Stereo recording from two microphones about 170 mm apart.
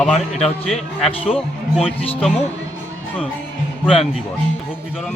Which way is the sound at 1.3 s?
5° right (ahead or behind).